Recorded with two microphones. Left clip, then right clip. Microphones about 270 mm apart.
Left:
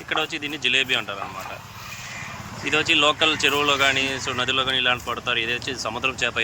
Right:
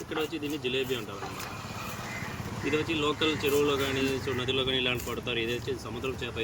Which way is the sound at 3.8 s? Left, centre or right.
Centre.